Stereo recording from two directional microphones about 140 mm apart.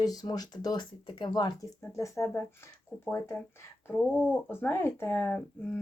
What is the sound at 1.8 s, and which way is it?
Speech, 20° left (ahead or behind).